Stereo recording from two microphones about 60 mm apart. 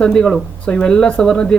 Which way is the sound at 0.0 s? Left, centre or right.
Centre.